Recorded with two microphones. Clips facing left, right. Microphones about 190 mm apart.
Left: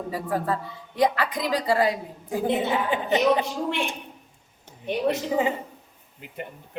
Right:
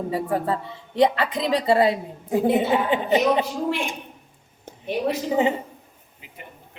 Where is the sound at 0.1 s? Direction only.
25° right (ahead or behind).